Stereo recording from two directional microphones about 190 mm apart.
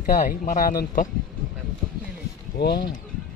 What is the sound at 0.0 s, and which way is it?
Speech, 45° left (ahead or behind).